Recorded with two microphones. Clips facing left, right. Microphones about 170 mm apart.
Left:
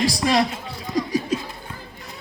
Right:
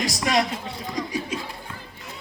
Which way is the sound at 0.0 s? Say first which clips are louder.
Left 3 dB; 30° left (ahead or behind).